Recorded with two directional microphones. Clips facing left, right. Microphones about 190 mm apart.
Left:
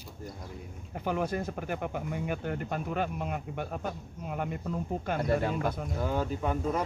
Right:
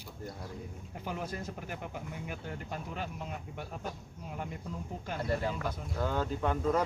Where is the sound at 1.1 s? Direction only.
60° left (ahead or behind).